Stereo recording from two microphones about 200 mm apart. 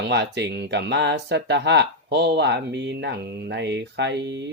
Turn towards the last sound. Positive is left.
turn(degrees=-60)  # may be behind; listen again after turning